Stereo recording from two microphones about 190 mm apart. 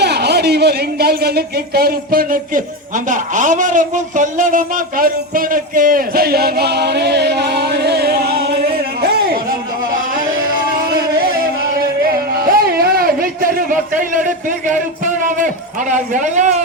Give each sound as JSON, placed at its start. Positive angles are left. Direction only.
{"t": 0.0, "sound": "speech", "side_deg": -60}
{"t": 12.0, "sound": "music", "side_deg": -50}
{"t": 14.7, "sound": "a man's voice", "side_deg": -45}